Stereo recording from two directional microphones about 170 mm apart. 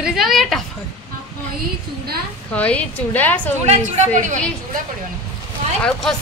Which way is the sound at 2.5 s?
10° left (ahead or behind).